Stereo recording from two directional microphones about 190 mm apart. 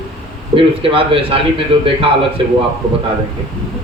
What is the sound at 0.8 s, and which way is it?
A man's voice, 30° right (ahead or behind).